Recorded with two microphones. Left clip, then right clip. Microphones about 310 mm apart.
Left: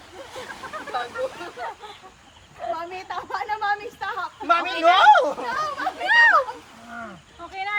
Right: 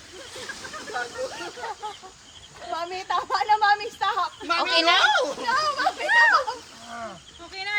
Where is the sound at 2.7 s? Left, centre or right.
Right.